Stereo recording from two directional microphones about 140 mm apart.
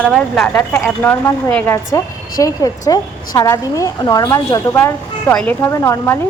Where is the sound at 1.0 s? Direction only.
15° left (ahead or behind).